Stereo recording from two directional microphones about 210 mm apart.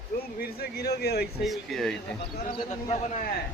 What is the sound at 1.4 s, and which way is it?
Speech, centre (ahead or behind).